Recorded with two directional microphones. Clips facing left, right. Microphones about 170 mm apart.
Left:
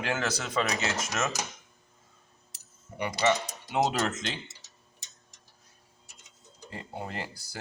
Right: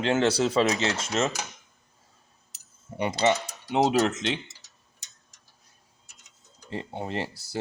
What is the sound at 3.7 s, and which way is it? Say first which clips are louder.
Speech: right 5 dB; 20° right (ahead or behind).